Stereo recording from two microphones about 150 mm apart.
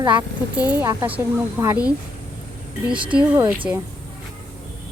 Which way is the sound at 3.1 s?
10° right (ahead or behind).